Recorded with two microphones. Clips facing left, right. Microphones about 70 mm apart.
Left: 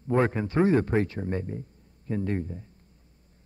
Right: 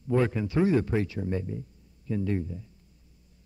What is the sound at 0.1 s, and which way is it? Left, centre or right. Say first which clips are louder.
Speech: left 1 dB; left.